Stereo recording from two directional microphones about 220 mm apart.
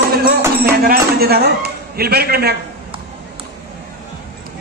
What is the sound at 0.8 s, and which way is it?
A man's voice, 45° right (ahead or behind).